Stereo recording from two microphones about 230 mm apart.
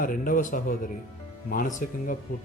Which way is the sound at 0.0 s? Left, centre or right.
Left.